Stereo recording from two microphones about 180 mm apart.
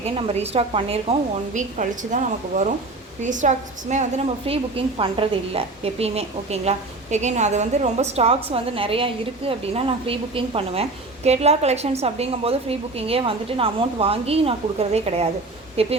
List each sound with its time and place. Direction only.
0.0 s a woman's voice: 35° right (ahead or behind)
1.5 s a woman's voice: 45° right (ahead or behind)